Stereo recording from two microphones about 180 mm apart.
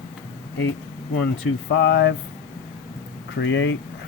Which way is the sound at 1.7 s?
80° left.